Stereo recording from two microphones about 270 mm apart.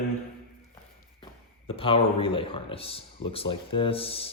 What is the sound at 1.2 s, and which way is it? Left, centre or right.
Speech, centre.